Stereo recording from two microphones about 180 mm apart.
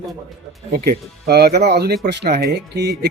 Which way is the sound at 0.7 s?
60° right (ahead or behind).